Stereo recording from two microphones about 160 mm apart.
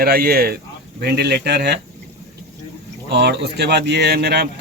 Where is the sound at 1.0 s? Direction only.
90° right.